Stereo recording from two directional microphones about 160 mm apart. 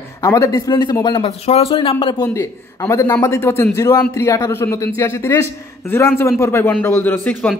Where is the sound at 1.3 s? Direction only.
40° left (ahead or behind).